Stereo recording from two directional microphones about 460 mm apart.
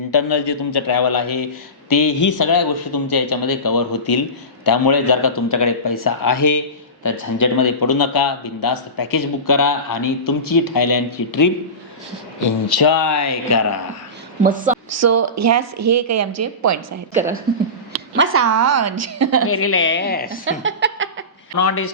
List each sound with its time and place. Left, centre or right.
0.1 s a man's voice: left
14.4 s speech: centre
14.8 s speech: right
18.2 s speech: right
19.5 s a woman's voice: left
20.4 s a sound: right
21.6 s speech: left